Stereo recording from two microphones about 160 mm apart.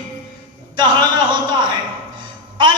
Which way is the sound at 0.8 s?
30° right (ahead or behind).